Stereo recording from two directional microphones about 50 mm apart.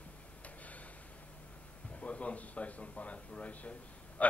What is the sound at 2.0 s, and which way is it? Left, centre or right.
A man's voice, left.